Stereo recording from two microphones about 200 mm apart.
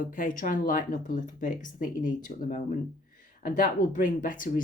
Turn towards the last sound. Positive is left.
turn(degrees=40)  # may be behind; listen again after turning